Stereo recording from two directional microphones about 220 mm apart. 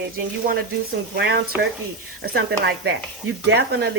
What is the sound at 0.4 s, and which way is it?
A woman's voice, 45° right (ahead or behind).